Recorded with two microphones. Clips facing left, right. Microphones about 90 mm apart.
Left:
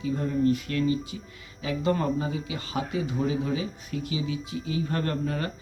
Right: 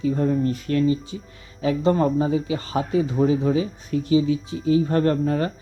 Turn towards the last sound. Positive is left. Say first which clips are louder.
# right 8 dB
turn(degrees=-35)  # may be behind; listen again after turning